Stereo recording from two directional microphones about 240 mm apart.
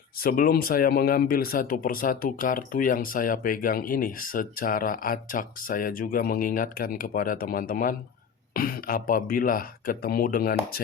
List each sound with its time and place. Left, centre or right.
0.2 s speech: left